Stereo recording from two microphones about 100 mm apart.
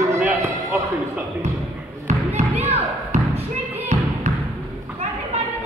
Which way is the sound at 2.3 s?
90° right.